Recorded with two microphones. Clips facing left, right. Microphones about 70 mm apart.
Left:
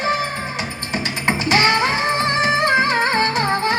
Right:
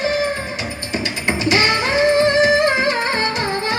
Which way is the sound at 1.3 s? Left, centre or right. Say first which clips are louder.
Left 1 dB; left.